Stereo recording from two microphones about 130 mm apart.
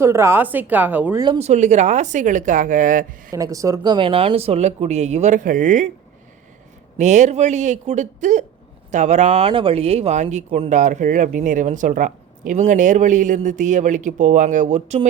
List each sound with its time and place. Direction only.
0.0 s a woman's voice: 20° right (ahead or behind)
1.4 s speech: 60° right (ahead or behind); by 3.3 s 90° right
3.3 s speech: 25° right (ahead or behind)
3.9 s speech: 45° right (ahead or behind); by 5.9 s 70° right (ahead or behind)
7.0 s speech: 65° right (ahead or behind)